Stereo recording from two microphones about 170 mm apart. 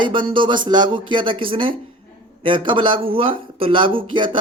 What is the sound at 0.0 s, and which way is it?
Speech, 30° right (ahead or behind).